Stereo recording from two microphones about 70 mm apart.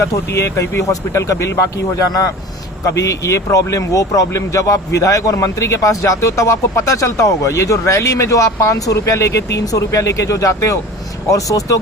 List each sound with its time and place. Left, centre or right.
0.0 s speech: left
2.8 s speech: left